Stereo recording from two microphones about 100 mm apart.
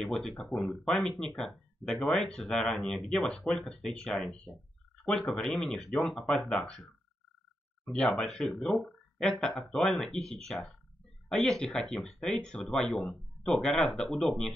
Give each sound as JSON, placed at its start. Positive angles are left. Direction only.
{"t": 0.0, "sound": "speech", "side_deg": 5}